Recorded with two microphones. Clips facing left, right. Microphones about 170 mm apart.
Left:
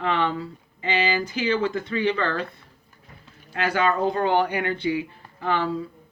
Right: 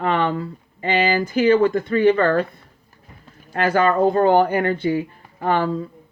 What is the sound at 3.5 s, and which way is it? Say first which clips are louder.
Speech: right 5 dB; 50° right (ahead or behind).